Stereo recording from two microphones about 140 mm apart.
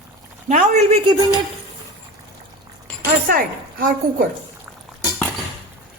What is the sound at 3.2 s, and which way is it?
A woman's voice, 90° right.